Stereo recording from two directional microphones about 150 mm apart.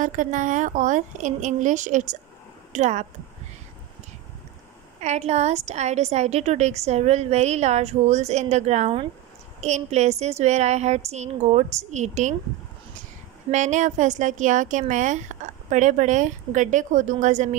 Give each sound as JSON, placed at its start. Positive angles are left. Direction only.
{"t": 0.0, "sound": "a woman's voice", "side_deg": -60}
{"t": 5.0, "sound": "a woman's voice", "side_deg": -50}
{"t": 13.5, "sound": "a woman's voice", "side_deg": -55}